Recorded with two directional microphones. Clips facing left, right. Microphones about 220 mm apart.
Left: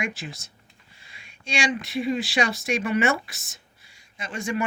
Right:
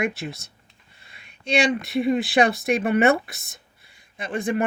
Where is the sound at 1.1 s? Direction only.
60° right (ahead or behind).